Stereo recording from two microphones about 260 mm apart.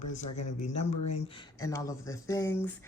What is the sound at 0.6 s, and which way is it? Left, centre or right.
Speech, left.